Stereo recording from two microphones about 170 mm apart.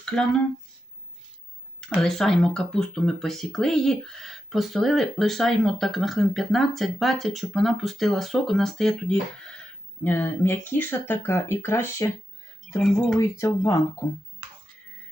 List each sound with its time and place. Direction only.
0.1 s speech: 5° left (ahead or behind)
2.0 s speech: centre (ahead or behind)
13.1 s speech: 15° left (ahead or behind)